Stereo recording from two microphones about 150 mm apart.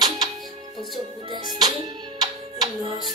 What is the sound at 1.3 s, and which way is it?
Music, 25° right (ahead or behind).